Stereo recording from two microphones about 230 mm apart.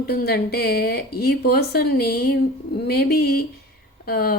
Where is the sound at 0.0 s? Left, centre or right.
Left.